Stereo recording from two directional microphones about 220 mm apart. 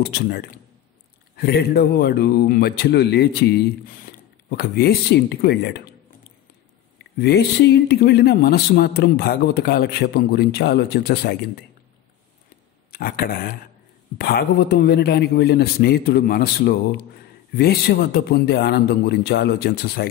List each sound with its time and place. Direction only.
0.0 s speech: 45° left (ahead or behind)
7.0 s speech: 50° left (ahead or behind)
12.9 s speech: 40° left (ahead or behind)